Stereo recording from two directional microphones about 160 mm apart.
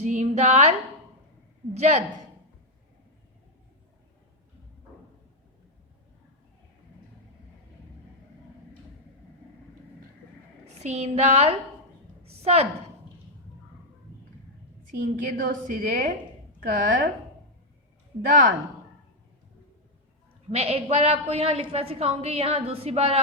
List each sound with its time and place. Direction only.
0.0 s a woman's voice: 45° right (ahead or behind)
1.7 s a sound: 45° right (ahead or behind)
10.8 s a sound: 45° right (ahead or behind)
14.8 s a woman's voice: 60° right (ahead or behind)
18.3 s a woman's voice: 55° right (ahead or behind)
20.5 s a woman's voice: 40° right (ahead or behind)